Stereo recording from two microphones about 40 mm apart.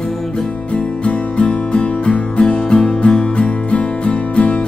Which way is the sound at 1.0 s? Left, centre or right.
Left.